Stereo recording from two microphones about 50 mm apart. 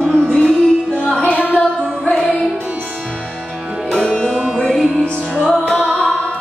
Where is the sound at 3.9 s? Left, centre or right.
Centre.